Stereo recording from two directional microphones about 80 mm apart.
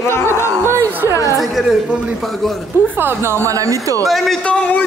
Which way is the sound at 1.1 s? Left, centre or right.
Left.